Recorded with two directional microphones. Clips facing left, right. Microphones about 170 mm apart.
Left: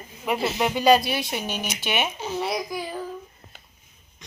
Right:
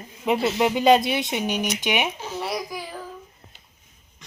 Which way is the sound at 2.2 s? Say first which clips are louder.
Left 3 dB; centre (ahead or behind).